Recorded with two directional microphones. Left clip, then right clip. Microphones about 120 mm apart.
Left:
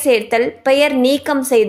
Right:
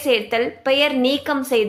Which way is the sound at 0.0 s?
40° left (ahead or behind).